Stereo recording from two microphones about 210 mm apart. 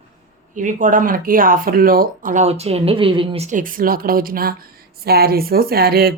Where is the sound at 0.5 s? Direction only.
35° right (ahead or behind).